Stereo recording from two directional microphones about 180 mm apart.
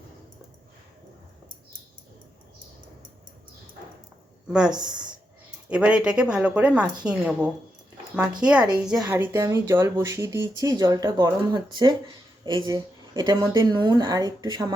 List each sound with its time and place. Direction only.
5.6 s a woman's voice: 5° right (ahead or behind)